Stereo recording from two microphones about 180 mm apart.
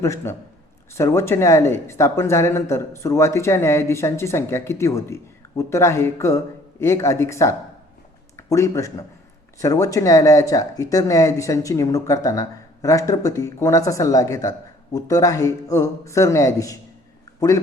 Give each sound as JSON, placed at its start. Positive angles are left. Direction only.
{"t": 0.0, "sound": "speech", "side_deg": 15}